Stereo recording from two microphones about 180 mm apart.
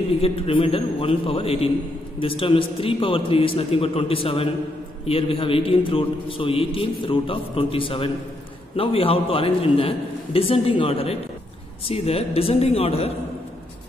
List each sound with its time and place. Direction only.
0.2 s a man's voice: 30° left (ahead or behind)